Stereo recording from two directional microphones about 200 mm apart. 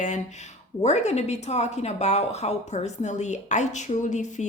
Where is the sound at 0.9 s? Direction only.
35° left (ahead or behind).